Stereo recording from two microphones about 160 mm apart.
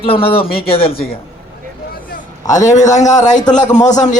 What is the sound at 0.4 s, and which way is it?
Speech, 70° left (ahead or behind).